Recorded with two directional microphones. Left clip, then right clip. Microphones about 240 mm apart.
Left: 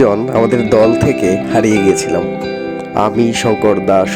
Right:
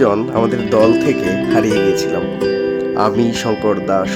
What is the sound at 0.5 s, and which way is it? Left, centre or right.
Speech, left.